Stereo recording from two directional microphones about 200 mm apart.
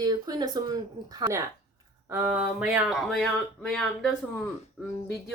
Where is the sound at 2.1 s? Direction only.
5° right (ahead or behind).